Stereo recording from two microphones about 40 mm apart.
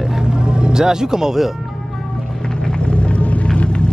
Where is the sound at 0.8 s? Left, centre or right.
Centre.